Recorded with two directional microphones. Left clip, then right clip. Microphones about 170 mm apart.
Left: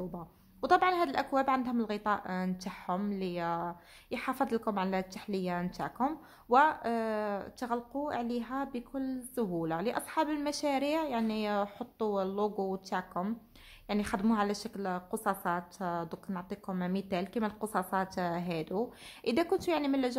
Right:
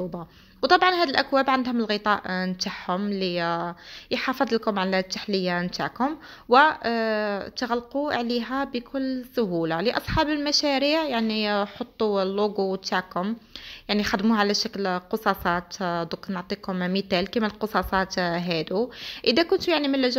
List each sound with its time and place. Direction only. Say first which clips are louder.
0.6 s a woman's voice: right 8 dB; 10° right (ahead or behind)